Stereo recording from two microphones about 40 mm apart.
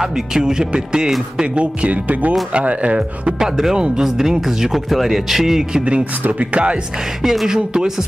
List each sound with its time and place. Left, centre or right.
0.0 s speech: centre; by 3.3 s right
3.7 s speech: right
4.0 s speech: centre
6.5 s speech: right
7.2 s speech: centre